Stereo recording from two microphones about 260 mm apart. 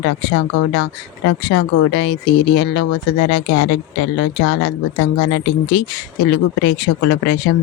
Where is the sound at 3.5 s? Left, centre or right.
Left.